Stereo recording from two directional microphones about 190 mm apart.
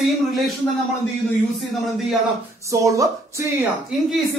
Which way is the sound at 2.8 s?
15° right (ahead or behind).